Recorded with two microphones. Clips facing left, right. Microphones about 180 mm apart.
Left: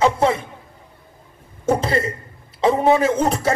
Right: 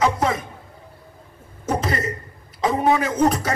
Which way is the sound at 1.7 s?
30° left (ahead or behind).